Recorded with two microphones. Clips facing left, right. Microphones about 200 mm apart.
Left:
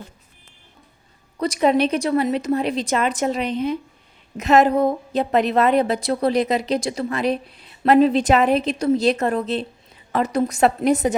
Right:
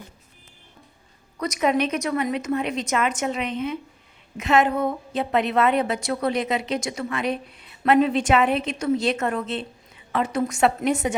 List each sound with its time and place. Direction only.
1.4 s a woman's voice: 30° left (ahead or behind)